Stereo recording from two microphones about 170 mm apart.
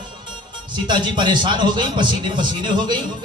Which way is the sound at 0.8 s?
25° right (ahead or behind).